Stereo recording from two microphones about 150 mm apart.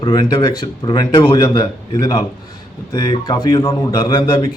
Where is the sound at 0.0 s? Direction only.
30° left (ahead or behind).